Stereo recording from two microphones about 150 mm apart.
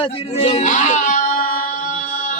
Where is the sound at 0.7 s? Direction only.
55° left (ahead or behind).